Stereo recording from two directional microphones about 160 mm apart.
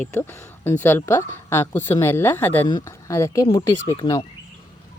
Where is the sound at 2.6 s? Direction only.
25° left (ahead or behind).